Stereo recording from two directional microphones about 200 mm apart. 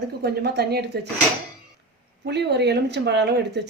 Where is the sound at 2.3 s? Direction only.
55° right (ahead or behind).